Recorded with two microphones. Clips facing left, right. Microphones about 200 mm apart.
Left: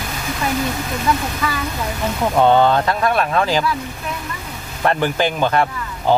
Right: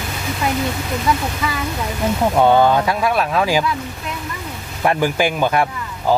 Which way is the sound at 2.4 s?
10° right (ahead or behind).